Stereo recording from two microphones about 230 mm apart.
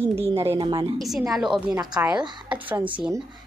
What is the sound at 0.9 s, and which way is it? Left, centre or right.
Speech, centre.